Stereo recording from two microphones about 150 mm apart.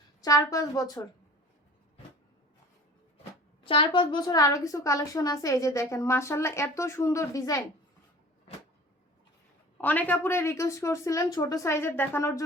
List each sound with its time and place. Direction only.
0.2 s a woman's voice: 25° left (ahead or behind)
3.6 s a woman's voice: 35° left (ahead or behind)
9.8 s a woman's voice: 10° left (ahead or behind)